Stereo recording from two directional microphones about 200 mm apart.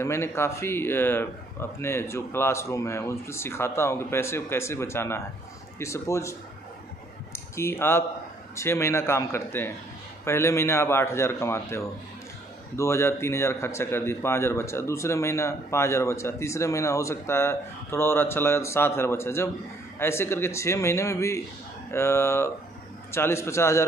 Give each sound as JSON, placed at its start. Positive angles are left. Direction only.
{"t": 0.0, "sound": "a man's voice", "side_deg": 15}
{"t": 7.3, "sound": "a man's voice", "side_deg": 15}